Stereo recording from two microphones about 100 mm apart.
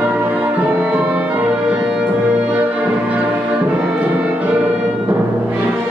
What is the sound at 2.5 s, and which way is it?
Brass instrument, 15° right (ahead or behind).